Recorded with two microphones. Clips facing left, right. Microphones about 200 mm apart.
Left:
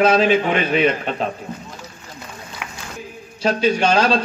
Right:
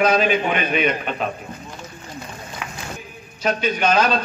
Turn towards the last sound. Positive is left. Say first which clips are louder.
# left 2 dB
turn(degrees=30)  # may be behind; listen again after turning